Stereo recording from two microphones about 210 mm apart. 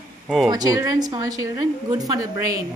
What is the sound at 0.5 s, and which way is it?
A woman's voice, 20° right (ahead or behind).